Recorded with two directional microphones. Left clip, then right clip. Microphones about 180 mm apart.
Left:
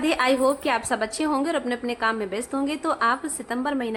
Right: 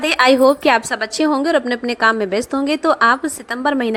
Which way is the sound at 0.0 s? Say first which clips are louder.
Right 9 dB; 40° right (ahead or behind).